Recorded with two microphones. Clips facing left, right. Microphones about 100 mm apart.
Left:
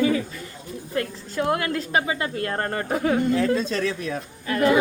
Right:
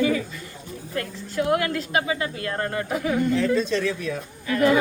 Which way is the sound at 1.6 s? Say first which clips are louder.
Left 1 dB; 30° left (ahead or behind).